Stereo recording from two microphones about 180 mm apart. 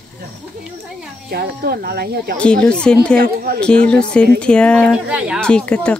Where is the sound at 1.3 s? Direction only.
60° right (ahead or behind).